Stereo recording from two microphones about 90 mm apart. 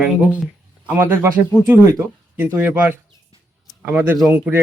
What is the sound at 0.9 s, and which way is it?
Speech, 25° right (ahead or behind).